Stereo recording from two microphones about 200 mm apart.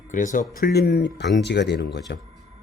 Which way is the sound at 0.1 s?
40° left (ahead or behind).